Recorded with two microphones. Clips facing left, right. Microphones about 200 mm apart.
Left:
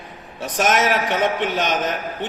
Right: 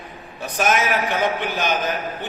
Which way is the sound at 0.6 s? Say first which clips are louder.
Left 2 dB; 80° left.